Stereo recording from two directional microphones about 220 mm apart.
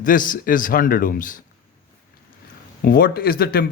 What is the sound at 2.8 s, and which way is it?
Speech, 40° left (ahead or behind).